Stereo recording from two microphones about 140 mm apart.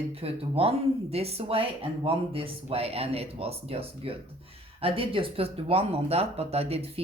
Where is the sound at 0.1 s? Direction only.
45° right (ahead or behind).